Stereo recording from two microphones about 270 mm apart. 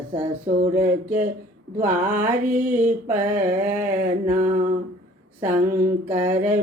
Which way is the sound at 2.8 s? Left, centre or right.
Centre.